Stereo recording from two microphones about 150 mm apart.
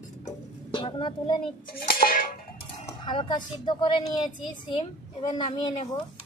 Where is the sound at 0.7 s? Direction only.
35° left (ahead or behind).